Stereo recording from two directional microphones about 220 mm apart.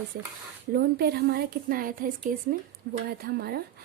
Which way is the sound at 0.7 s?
45° right (ahead or behind).